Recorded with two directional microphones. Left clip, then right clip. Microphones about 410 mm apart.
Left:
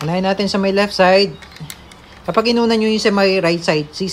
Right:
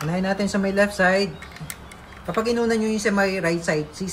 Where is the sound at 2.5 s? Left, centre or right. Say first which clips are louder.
Left 4 dB; centre.